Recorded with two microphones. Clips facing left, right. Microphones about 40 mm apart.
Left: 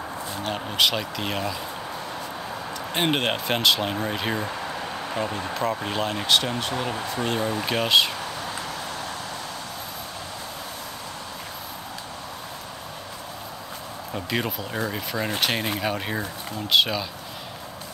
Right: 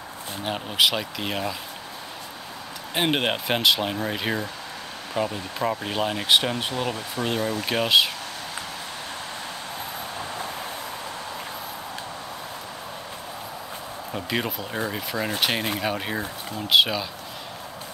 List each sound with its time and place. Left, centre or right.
0.4 s speech: centre
2.9 s speech: centre
6.2 s speech: centre
6.8 s speech: centre
14.1 s speech: centre